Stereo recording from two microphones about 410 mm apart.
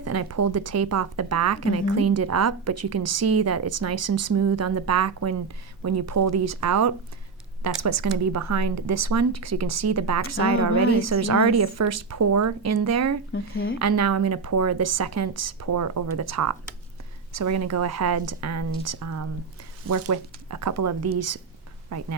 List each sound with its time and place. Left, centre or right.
0.0 s speech: right
13.3 s speech: left
13.7 s speech: right